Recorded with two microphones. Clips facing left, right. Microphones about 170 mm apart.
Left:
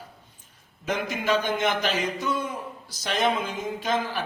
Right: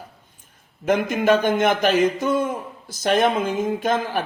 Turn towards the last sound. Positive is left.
turn(degrees=-50)  # may be behind; listen again after turning